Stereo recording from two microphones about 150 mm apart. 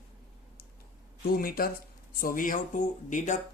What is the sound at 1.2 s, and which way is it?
Speech, 80° left.